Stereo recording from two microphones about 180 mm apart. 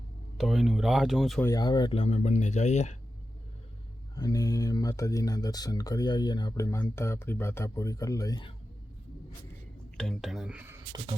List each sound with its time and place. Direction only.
0.3 s speech: centre (ahead or behind)
1.4 s speech: 20° left (ahead or behind); by 3.0 s 40° left (ahead or behind)
4.1 s speech: 20° left (ahead or behind)
10.0 s speech: centre (ahead or behind)